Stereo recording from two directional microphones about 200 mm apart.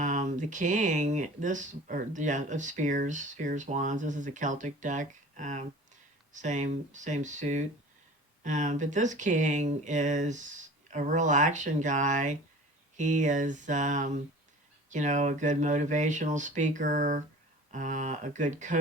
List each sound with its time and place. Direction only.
0.0 s speech: 40° right (ahead or behind)